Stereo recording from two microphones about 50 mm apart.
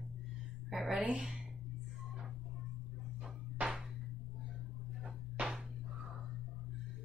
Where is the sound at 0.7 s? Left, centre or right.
Centre.